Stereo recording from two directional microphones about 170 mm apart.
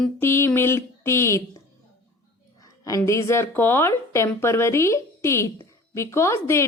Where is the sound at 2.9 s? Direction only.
20° left (ahead or behind).